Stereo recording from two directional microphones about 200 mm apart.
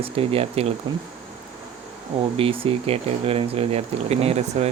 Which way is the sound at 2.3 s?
25° right (ahead or behind).